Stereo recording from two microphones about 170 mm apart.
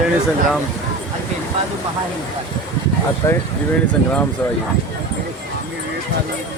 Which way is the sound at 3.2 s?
15° left (ahead or behind).